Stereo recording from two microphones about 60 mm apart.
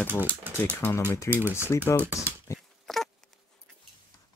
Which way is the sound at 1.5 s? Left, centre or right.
Left.